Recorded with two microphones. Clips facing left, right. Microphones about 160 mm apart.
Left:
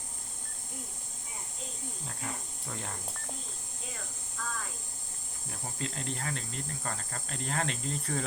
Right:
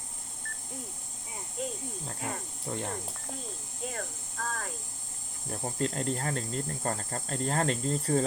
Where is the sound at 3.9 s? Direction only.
55° right (ahead or behind).